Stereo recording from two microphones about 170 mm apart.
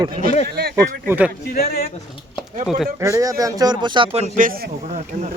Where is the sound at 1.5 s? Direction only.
60° left (ahead or behind).